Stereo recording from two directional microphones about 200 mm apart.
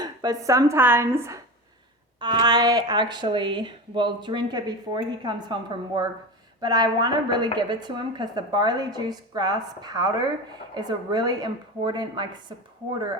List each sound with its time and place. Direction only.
0.0 s speech: 20° right (ahead or behind)